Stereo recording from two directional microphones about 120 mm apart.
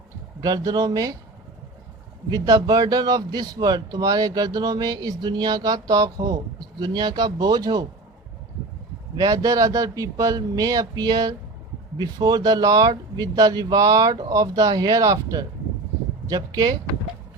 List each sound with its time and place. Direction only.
0.4 s speech: 30° right (ahead or behind)
2.3 s speech: 30° right (ahead or behind)
9.1 s speech: 30° right (ahead or behind)